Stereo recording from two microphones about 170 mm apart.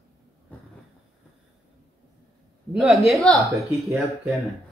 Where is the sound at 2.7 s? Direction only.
5° right (ahead or behind).